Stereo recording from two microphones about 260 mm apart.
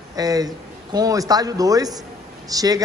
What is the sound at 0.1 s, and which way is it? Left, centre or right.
A man's voice, centre.